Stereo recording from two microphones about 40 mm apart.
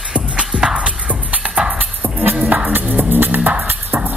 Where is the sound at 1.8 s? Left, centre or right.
Right.